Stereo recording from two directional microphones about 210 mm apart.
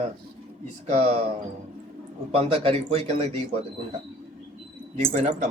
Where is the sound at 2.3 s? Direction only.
25° right (ahead or behind).